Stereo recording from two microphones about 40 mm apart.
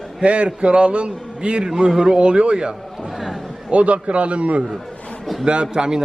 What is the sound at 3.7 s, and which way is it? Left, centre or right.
Speech, right.